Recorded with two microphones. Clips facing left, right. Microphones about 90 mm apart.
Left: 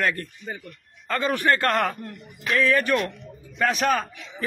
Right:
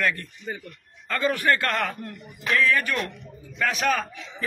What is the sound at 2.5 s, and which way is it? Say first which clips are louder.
A man's voice: left 2 dB; 30° left (ahead or behind).